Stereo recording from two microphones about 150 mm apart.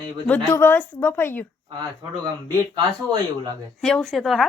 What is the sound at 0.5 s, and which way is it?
Speech, 15° left (ahead or behind).